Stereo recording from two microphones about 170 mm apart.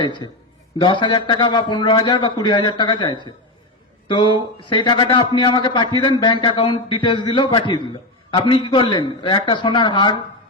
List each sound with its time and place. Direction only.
0.0 s a man's voice: 25° left (ahead or behind)